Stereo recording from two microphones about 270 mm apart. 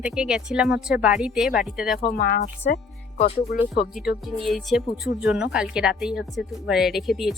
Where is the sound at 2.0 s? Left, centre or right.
Left.